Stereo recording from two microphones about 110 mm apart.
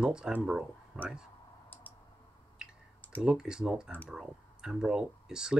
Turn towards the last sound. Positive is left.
turn(degrees=-5)  # may be behind; listen again after turning